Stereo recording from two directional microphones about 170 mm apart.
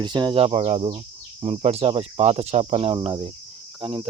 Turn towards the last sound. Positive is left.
turn(degrees=-30)  # may be behind; listen again after turning